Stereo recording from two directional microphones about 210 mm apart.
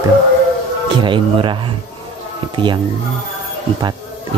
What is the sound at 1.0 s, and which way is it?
Speech, 25° right (ahead or behind).